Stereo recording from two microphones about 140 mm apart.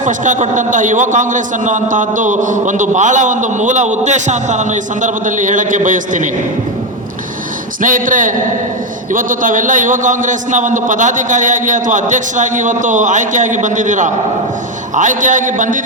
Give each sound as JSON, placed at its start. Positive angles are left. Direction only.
{"t": 0.0, "sound": "a man's voice", "side_deg": -60}
{"t": 7.8, "sound": "a man's voice", "side_deg": -70}